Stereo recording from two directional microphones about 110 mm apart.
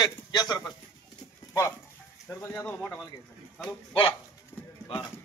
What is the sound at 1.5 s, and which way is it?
Speech, 25° left (ahead or behind).